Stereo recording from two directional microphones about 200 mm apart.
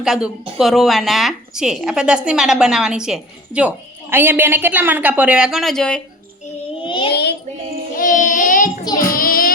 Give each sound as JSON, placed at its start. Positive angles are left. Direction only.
{"t": 0.0, "sound": "speech", "side_deg": 0}
{"t": 6.8, "sound": "child singing", "side_deg": 25}
{"t": 7.1, "sound": "child singing", "side_deg": 55}
{"t": 7.9, "sound": "child singing", "side_deg": 40}